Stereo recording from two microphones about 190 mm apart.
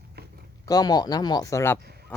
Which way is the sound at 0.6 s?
20° left (ahead or behind).